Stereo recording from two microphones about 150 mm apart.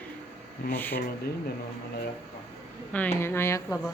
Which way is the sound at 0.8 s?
15° left (ahead or behind).